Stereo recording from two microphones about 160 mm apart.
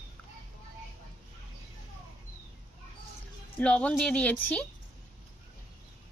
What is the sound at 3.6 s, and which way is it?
Speech, 5° left (ahead or behind).